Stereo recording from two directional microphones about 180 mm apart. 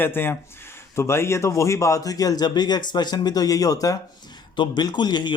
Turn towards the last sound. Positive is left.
turn(degrees=25)  # may be behind; listen again after turning